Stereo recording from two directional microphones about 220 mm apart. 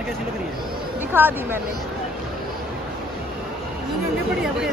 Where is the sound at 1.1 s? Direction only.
10° right (ahead or behind).